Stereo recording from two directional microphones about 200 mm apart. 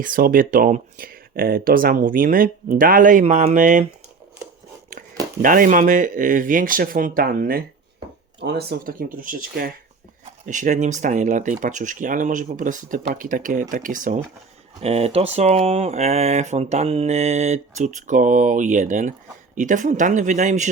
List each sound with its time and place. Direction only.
0.0 s speech: 45° right (ahead or behind)
5.4 s speech: 40° right (ahead or behind)
14.8 s speech: 30° right (ahead or behind)